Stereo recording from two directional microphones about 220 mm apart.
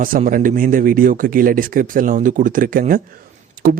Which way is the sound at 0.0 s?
40° right (ahead or behind).